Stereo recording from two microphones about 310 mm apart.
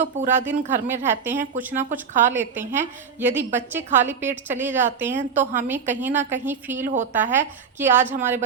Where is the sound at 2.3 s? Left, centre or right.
Centre.